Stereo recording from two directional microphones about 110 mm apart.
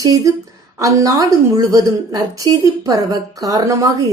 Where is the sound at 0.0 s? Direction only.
35° right (ahead or behind).